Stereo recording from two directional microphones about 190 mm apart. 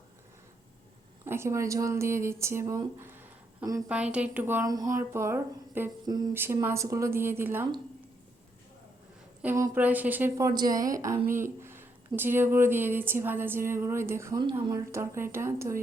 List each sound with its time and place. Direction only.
1.2 s speech: 15° right (ahead or behind)
3.8 s speech: 5° right (ahead or behind)
9.4 s speech: 10° right (ahead or behind)
11.3 s speech: 45° right (ahead or behind)
11.6 s speech: 10° right (ahead or behind)